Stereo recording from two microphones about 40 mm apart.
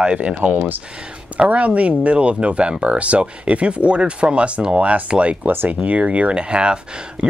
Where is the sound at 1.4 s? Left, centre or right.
Right.